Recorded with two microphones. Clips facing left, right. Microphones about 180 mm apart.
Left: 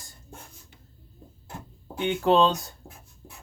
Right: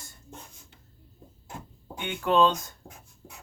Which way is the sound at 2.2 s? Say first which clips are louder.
Left 1 dB; 35° left (ahead or behind).